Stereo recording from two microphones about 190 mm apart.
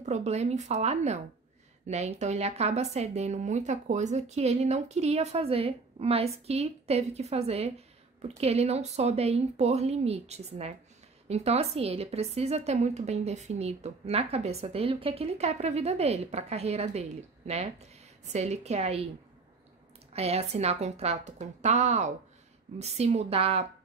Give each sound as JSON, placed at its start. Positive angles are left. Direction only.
{"t": 0.0, "sound": "a woman's voice", "side_deg": -35}
{"t": 20.1, "sound": "a woman's voice", "side_deg": -35}